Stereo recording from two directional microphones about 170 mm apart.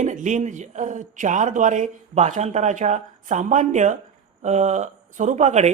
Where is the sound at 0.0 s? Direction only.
45° right (ahead or behind).